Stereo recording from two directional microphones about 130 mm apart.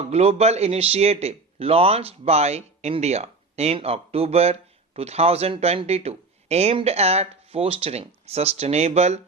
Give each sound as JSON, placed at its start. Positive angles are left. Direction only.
{"t": 0.0, "sound": "speech", "side_deg": -55}